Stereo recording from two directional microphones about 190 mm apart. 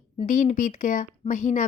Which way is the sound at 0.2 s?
40° left (ahead or behind).